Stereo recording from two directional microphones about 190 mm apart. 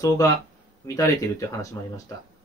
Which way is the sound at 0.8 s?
15° left (ahead or behind).